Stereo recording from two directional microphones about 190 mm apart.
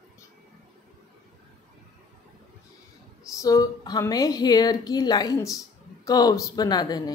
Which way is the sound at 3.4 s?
20° left (ahead or behind).